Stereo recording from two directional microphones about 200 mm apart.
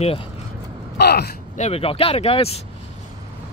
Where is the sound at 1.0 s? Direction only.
55° left (ahead or behind).